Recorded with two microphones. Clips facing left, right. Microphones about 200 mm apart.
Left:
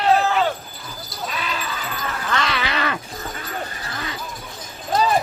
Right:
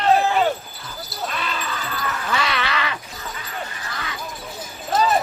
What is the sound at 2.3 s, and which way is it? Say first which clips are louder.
Groan: left 1 dB; 5° right (ahead or behind).